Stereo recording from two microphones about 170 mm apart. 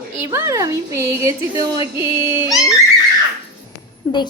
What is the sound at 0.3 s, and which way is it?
Speech, 20° right (ahead or behind).